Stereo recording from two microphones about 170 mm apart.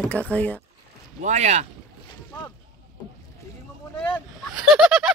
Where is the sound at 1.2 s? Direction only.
45° right (ahead or behind).